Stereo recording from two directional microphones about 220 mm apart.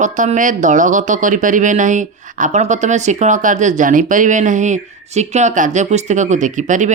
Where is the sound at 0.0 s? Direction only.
35° right (ahead or behind).